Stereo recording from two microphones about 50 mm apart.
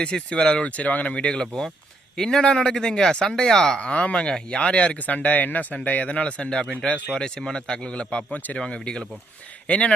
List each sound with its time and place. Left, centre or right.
0.0 s speech: left
0.7 s speech: left; by 3.8 s centre
3.8 s speech: left
4.9 s speech: left